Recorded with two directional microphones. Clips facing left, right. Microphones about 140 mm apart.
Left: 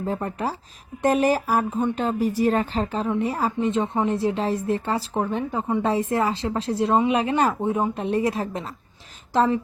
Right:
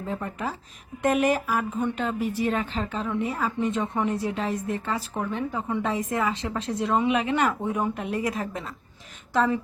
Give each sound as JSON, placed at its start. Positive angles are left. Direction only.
{"t": 0.0, "sound": "a woman's voice", "side_deg": 35}